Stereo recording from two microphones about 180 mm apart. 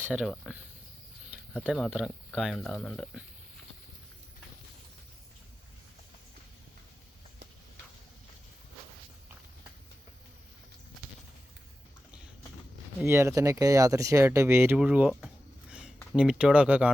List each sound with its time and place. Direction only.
0.0 s speech: 5° right (ahead or behind)
1.6 s speech: centre (ahead or behind)
13.0 s speech: 15° right (ahead or behind)
16.1 s speech: 5° right (ahead or behind)